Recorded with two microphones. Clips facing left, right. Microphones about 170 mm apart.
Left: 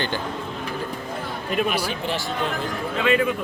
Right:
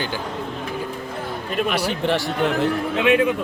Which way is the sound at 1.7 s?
70° right (ahead or behind).